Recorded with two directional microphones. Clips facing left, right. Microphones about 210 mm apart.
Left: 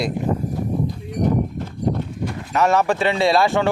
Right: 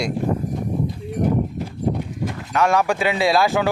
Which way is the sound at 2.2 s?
5° left (ahead or behind).